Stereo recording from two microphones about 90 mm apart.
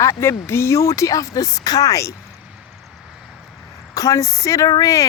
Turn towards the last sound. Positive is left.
turn(degrees=40)  # may be behind; listen again after turning